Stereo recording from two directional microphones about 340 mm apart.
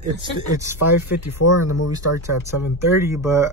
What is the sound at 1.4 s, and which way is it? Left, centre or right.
Speech, left.